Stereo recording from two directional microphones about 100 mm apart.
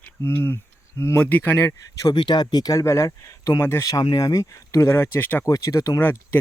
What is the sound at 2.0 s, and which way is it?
Speech, 45° left (ahead or behind).